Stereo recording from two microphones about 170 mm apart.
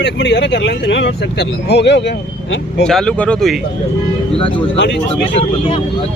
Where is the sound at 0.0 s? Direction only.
90° left.